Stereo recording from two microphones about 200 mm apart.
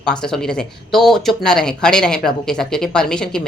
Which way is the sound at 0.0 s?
5° left (ahead or behind).